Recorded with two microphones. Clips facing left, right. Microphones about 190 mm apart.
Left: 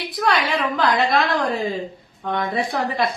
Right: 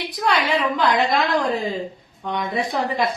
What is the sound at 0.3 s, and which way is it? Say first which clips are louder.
Speech: right 1 dB; 20° right (ahead or behind).